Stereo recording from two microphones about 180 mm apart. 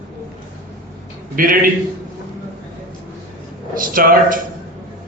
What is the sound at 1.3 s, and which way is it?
Speech, 50° right (ahead or behind).